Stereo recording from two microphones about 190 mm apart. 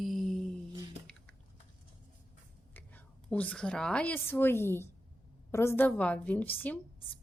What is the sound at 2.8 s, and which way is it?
A woman's voice, 10° left (ahead or behind).